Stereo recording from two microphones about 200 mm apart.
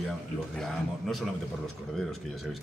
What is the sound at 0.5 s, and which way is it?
Speech, centre (ahead or behind).